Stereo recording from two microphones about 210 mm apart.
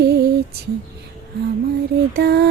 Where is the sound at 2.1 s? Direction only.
50° right (ahead or behind).